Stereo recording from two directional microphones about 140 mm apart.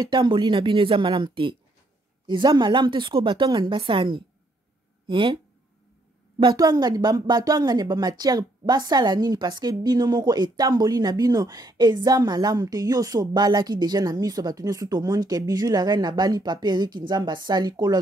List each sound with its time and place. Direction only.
0.0 s a woman's voice: 35° right (ahead or behind)
6.4 s speech: 30° right (ahead or behind)